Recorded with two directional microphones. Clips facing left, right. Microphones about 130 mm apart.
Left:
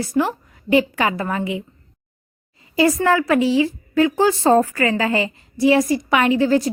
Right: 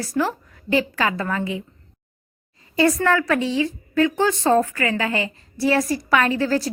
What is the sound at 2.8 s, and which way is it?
A woman's voice, 20° left (ahead or behind).